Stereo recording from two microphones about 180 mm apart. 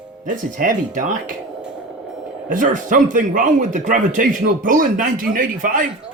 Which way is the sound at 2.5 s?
45° right (ahead or behind).